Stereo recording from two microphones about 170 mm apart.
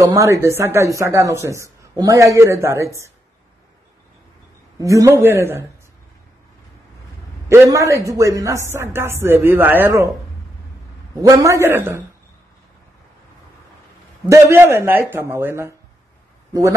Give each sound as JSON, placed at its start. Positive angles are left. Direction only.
{"t": 0.0, "sound": "speech", "side_deg": -20}
{"t": 4.7, "sound": "speech", "side_deg": -20}
{"t": 7.4, "sound": "speech", "side_deg": -15}
{"t": 11.1, "sound": "speech", "side_deg": -20}
{"t": 14.3, "sound": "speech", "side_deg": -15}